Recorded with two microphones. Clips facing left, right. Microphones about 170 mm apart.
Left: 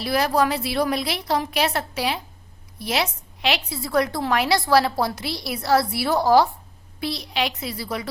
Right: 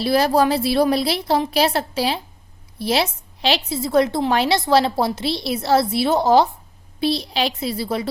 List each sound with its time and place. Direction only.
0.0 s a woman's voice: 30° right (ahead or behind)